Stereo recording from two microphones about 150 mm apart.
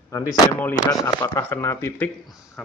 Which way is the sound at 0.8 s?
25° left (ahead or behind).